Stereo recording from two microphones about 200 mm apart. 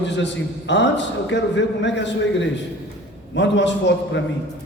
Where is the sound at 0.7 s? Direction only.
60° left (ahead or behind).